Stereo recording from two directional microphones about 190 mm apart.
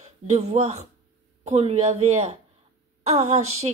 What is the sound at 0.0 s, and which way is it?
A woman's voice, 35° right (ahead or behind).